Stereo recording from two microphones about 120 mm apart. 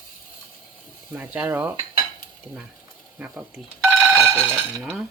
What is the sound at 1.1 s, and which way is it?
Dishes, 15° right (ahead or behind).